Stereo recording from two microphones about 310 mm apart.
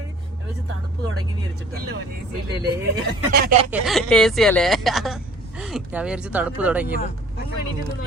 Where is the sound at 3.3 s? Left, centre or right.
Right.